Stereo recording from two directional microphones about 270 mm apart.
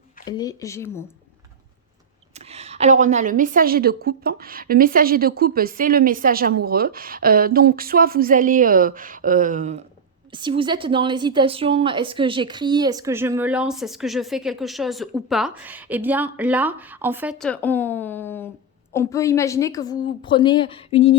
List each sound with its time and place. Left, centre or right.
0.3 s a woman's voice: centre
2.3 s a woman's voice: right; by 21.2 s left